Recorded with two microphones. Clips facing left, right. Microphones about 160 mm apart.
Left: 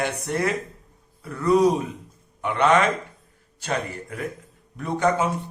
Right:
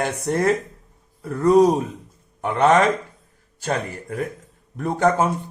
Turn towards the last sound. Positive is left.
turn(degrees=-45)  # may be behind; listen again after turning